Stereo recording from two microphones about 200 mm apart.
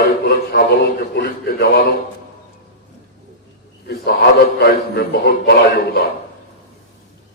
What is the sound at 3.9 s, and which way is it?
A man's voice, 55° left (ahead or behind).